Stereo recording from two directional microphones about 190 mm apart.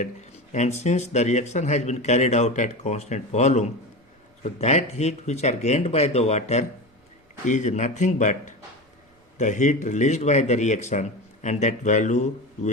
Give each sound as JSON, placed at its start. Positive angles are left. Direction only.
{"t": 0.9, "sound": "a man's voice", "side_deg": 35}